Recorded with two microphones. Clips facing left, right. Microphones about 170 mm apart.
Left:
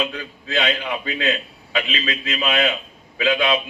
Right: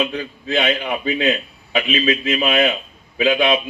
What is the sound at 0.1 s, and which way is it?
A man's voice, 25° right (ahead or behind).